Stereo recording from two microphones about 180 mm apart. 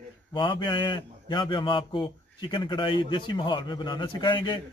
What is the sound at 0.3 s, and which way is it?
A man's voice, 25° left (ahead or behind).